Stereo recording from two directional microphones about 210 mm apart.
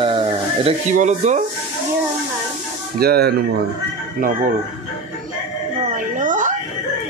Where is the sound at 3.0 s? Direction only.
50° right (ahead or behind).